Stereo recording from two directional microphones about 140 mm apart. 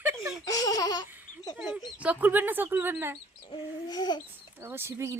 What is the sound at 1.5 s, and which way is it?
Speech, 5° right (ahead or behind).